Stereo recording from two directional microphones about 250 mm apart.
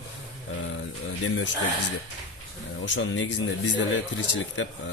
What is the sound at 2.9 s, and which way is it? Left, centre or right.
Speech, left.